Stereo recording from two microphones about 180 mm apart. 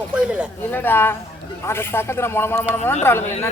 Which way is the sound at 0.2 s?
5° right (ahead or behind).